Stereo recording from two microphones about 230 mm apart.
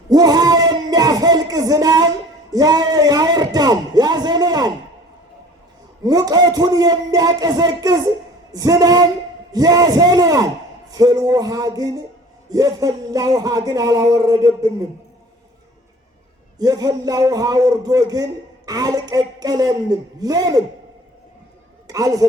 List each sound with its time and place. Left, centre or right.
0.1 s a sound: centre
6.0 s a man's voice: centre
16.6 s a man's voice: centre
21.8 s speech: centre